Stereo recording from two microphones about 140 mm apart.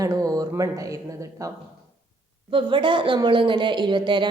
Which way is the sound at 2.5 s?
35° right (ahead or behind).